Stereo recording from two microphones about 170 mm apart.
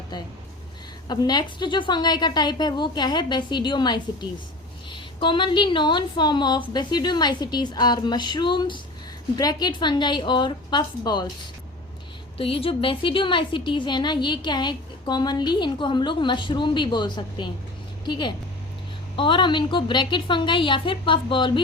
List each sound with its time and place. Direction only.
1.0 s a woman's voice: 25° left (ahead or behind)
12.4 s a woman's voice: 35° left (ahead or behind)